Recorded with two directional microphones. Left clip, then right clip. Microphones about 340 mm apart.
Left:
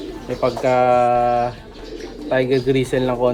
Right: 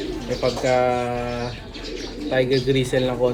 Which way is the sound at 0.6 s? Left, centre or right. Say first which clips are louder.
Left 6 dB; left.